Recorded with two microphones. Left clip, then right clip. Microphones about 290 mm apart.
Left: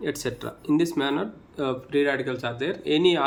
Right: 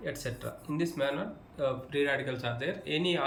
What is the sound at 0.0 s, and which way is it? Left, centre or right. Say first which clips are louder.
Speech: left 8 dB; centre.